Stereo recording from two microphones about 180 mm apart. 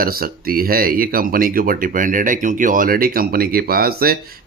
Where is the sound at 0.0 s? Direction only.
55° right (ahead or behind).